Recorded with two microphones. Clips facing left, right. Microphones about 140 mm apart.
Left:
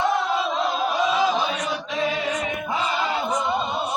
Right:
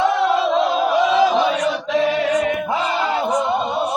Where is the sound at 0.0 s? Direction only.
90° right.